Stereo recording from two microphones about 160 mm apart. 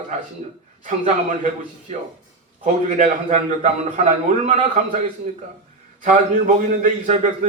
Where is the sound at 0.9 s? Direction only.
50° right (ahead or behind).